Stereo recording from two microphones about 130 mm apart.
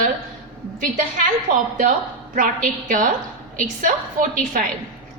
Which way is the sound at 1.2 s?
90° right.